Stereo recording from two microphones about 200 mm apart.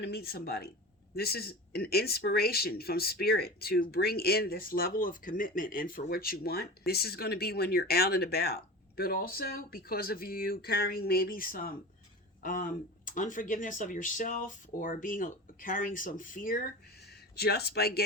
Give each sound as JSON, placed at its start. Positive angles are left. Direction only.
{"t": 0.0, "sound": "speech", "side_deg": 50}